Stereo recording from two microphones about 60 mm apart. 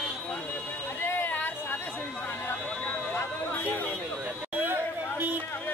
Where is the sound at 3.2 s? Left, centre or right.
Left.